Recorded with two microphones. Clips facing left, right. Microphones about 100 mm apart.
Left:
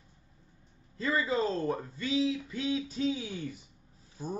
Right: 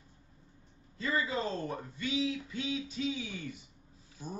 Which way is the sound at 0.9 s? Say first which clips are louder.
Left 3 dB; 35° left (ahead or behind).